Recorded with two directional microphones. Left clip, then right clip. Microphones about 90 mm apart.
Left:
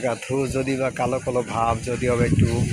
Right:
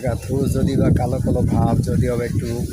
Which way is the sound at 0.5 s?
10° right (ahead or behind).